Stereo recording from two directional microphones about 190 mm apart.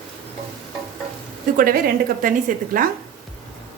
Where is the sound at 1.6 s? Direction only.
50° right (ahead or behind).